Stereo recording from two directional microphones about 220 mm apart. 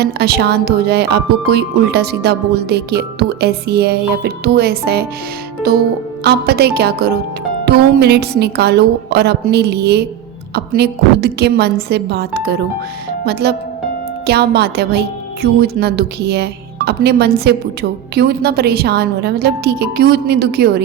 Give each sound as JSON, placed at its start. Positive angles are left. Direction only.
{"t": 0.0, "sound": "speech", "side_deg": -45}